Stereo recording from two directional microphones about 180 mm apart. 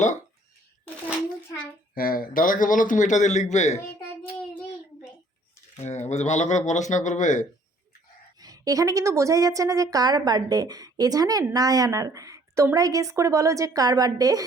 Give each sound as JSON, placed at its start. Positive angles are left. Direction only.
{"t": 2.0, "sound": "a man's voice", "side_deg": 55}
{"t": 5.7, "sound": "speech", "side_deg": 40}
{"t": 8.4, "sound": "a woman's voice", "side_deg": -20}